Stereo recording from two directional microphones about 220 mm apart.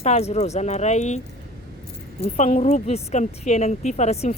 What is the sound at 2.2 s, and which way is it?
Speech, 30° left (ahead or behind).